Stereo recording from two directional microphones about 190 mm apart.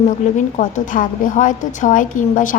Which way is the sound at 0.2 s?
40° left (ahead or behind).